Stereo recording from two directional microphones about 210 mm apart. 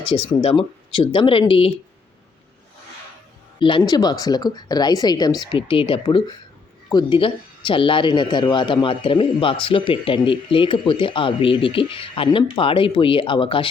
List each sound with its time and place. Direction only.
0.3 s a man's voice: 25° left (ahead or behind)
3.6 s a man's voice: 25° left (ahead or behind)